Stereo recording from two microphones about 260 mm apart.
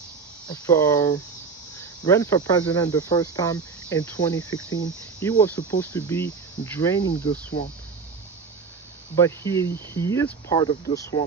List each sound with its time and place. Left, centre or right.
0.4 s cricket: centre
4.4 s cricket: left
5.4 s cricket: centre
9.1 s cricket: centre